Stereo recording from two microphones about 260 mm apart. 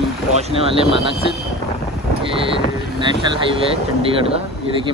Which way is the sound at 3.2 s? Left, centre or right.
Centre.